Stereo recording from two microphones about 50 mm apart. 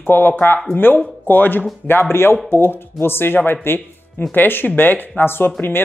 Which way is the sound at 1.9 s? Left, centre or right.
Left.